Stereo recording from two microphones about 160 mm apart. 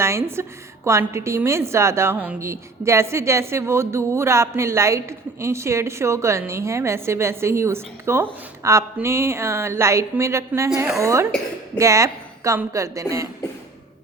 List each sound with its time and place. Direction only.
0.0 s a woman's voice: 15° right (ahead or behind)